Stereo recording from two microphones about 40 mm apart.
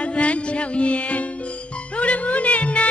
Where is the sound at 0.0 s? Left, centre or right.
Left.